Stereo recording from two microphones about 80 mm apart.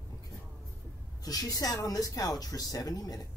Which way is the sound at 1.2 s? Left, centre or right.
Left.